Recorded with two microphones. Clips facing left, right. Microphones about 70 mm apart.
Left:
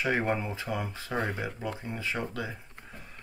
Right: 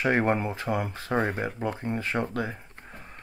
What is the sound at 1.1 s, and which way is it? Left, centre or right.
Speech, right.